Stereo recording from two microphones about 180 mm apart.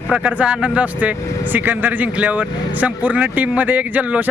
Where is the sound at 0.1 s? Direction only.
5° right (ahead or behind).